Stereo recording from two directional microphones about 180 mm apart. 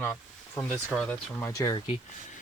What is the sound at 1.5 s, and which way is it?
Speech, 20° left (ahead or behind).